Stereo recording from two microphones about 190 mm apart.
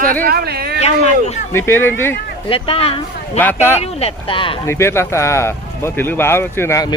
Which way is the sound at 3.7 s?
30° left (ahead or behind).